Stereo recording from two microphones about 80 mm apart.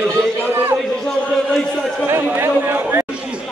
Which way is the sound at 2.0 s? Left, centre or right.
Right.